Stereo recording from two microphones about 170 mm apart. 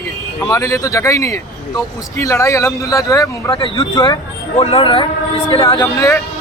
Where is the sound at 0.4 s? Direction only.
20° left (ahead or behind).